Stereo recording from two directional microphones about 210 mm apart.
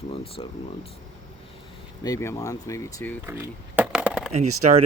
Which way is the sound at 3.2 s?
10° right (ahead or behind).